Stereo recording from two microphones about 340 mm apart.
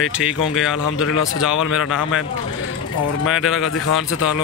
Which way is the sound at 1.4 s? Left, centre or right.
Centre.